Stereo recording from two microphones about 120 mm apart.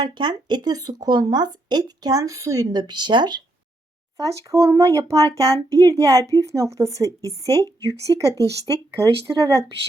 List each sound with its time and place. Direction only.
0.0 s speech: 40° right (ahead or behind)
4.2 s speech: 25° right (ahead or behind)